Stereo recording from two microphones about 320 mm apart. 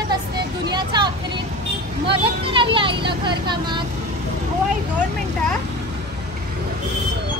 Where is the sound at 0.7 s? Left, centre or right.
Centre.